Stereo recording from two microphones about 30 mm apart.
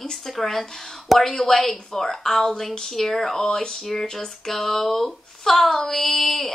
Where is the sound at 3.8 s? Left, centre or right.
Centre.